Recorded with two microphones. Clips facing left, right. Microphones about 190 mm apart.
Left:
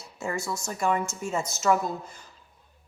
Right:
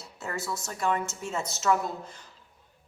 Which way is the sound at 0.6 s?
10° left (ahead or behind).